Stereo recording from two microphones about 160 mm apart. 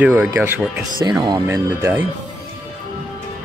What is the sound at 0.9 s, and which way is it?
Speech, 25° right (ahead or behind).